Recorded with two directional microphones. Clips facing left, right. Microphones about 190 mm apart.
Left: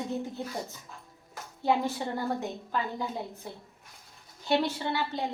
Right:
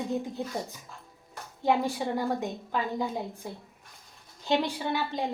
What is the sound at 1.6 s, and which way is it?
A woman's voice, 15° right (ahead or behind).